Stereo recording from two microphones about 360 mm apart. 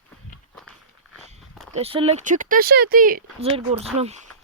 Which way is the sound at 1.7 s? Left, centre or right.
Centre.